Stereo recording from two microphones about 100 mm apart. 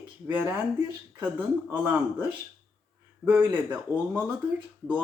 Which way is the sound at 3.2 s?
15° right (ahead or behind).